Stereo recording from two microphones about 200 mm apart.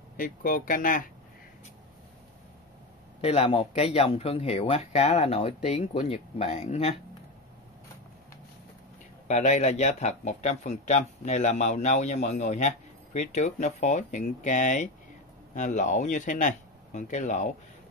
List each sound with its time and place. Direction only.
0.2 s speech: 40° left (ahead or behind)
3.2 s speech: 30° left (ahead or behind)
9.3 s speech: 35° left (ahead or behind)